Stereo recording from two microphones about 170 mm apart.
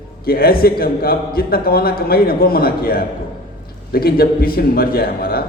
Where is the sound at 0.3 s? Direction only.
60° left (ahead or behind).